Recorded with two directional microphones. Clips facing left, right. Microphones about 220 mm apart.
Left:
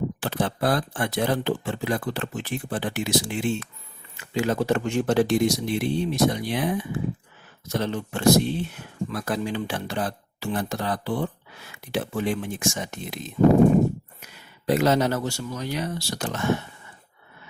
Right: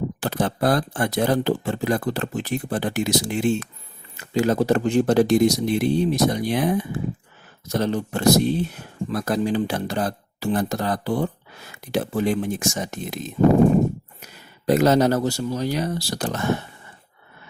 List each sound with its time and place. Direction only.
0.2 s speech: 40° right (ahead or behind)